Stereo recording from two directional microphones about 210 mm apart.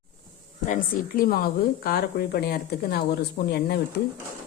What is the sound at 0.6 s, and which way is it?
A woman's voice, 40° left (ahead or behind).